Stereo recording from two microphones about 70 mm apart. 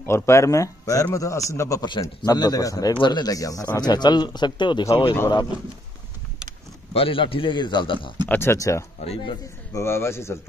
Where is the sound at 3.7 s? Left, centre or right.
Left.